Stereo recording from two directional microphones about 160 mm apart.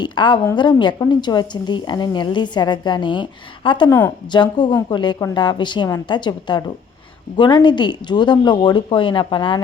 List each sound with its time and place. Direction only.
0.0 s a woman's voice: 30° left (ahead or behind)